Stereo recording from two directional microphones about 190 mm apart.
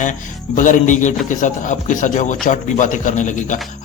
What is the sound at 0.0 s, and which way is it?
Speech, 40° left (ahead or behind).